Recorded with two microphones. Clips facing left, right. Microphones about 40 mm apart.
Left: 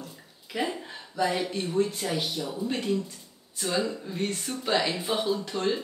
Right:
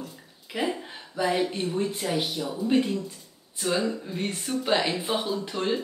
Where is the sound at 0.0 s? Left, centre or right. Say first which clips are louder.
Right 3 dB; centre.